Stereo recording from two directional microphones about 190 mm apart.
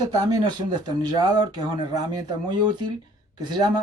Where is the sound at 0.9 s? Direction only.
20° right (ahead or behind).